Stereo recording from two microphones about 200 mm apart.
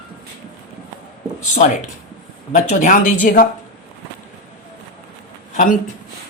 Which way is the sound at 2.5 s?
35° left (ahead or behind).